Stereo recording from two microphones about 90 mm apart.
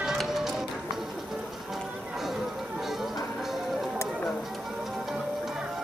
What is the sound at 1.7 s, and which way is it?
Music, 5° right (ahead or behind).